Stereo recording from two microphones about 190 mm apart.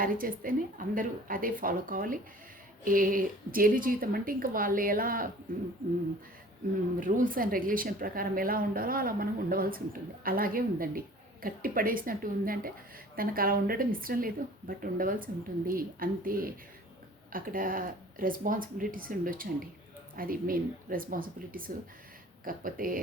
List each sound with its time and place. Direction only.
0.0 s a woman's voice: 45° right (ahead or behind)
7.0 s a woman's voice: 45° right (ahead or behind)